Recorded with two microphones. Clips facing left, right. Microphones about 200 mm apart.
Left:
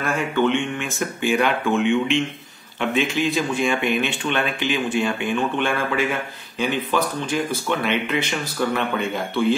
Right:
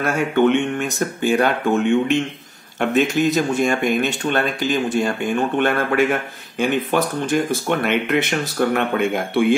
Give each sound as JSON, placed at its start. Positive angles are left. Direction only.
{"t": 0.0, "sound": "speech", "side_deg": -45}
{"t": 8.1, "sound": "speech", "side_deg": -60}